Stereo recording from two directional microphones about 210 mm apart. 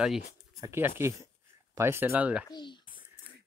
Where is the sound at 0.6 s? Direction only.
10° right (ahead or behind).